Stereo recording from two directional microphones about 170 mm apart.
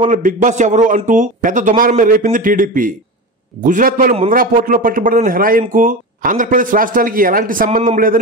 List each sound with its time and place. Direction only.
0.1 s a man's voice: 50° right (ahead or behind)